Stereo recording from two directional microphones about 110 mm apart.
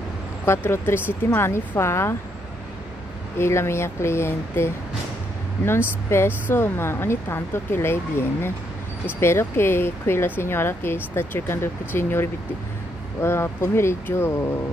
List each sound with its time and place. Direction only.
0.5 s speech: 20° left (ahead or behind)
3.3 s speech: 25° left (ahead or behind)
6.0 s speech: 20° left (ahead or behind)